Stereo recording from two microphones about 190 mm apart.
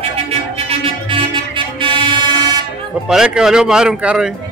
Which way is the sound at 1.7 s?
25° right (ahead or behind).